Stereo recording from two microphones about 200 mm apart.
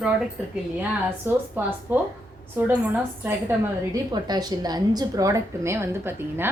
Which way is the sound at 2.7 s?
10° right (ahead or behind).